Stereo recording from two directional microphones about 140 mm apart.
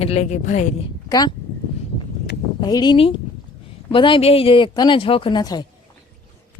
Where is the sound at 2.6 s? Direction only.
30° left (ahead or behind).